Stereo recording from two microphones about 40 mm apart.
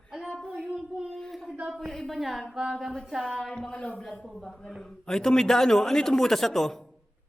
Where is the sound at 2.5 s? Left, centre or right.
Centre.